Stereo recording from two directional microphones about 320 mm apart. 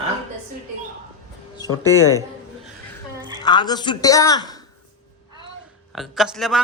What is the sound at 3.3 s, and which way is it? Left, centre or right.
A woman's voice, centre.